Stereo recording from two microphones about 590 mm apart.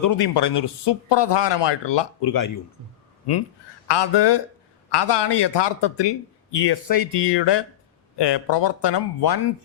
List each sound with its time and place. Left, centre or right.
0.0 s speech: left
3.8 s speech: left